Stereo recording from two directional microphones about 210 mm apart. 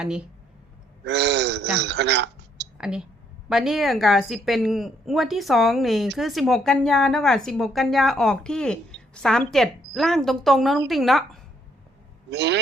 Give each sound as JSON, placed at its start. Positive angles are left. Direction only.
{"t": 1.0, "sound": "speech", "side_deg": -55}
{"t": 2.7, "sound": "a woman's voice", "side_deg": -5}
{"t": 12.3, "sound": "speech", "side_deg": -55}